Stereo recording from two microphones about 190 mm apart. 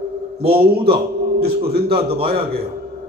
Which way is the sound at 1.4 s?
55° right (ahead or behind).